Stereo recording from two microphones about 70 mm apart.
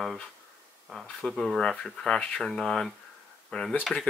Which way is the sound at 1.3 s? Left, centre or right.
Centre.